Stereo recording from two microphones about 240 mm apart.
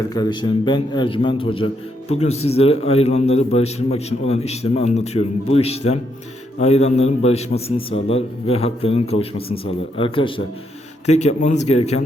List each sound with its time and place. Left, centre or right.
0.1 s a man's voice: centre